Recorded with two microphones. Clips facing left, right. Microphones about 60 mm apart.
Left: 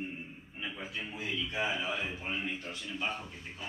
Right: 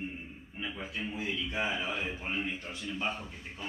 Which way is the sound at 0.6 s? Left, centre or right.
Centre.